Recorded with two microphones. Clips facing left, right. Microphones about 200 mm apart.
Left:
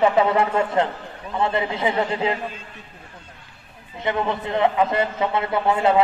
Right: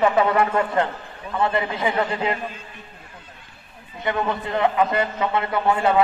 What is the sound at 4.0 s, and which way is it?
A man's voice, 25° left (ahead or behind).